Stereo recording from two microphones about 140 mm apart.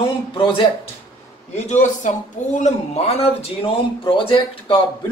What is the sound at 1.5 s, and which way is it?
A man's voice, 55° left (ahead or behind).